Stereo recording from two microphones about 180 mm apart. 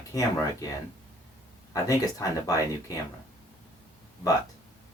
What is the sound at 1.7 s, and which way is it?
Speech, 20° left (ahead or behind).